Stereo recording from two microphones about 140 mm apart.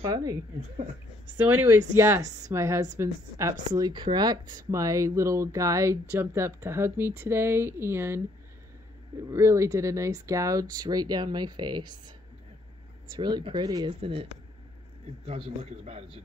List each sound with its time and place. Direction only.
1.5 s speech: 15° right (ahead or behind)
3.6 s speech: 30° right (ahead or behind)
9.3 s speech: 20° right (ahead or behind)
13.1 s speech: 35° right (ahead or behind)
13.8 s a man's voice: 40° right (ahead or behind)
15.2 s a man's voice: 45° right (ahead or behind)